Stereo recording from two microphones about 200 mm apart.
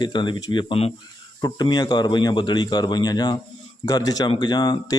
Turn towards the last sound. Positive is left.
turn(degrees=20)  # may be behind; listen again after turning